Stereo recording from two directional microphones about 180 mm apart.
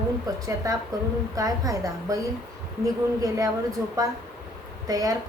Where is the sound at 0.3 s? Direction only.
20° right (ahead or behind).